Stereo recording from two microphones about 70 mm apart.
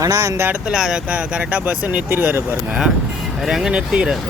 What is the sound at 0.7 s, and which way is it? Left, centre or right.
Speech, centre.